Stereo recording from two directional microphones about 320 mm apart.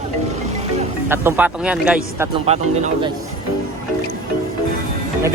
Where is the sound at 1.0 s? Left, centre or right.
Centre.